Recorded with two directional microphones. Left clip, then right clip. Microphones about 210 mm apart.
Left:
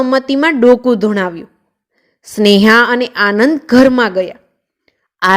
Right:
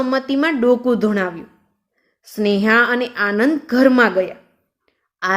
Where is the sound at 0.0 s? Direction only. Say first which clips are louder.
Left 6 dB; 35° left (ahead or behind).